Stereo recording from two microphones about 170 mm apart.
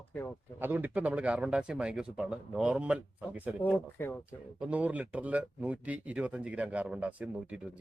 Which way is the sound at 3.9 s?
15° left (ahead or behind).